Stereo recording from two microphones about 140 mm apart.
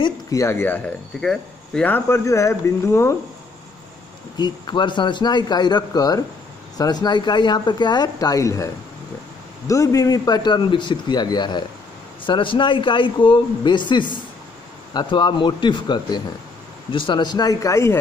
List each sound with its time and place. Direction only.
0.0 s speech: 25° left (ahead or behind)
4.4 s speech: 35° left (ahead or behind)
9.7 s speech: 25° left (ahead or behind)